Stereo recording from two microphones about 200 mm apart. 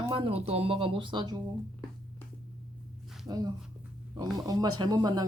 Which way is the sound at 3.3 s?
20° right (ahead or behind).